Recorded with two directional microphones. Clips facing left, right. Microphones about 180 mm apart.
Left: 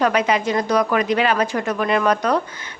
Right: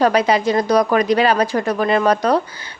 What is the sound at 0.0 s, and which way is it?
A woman's voice, 35° right (ahead or behind).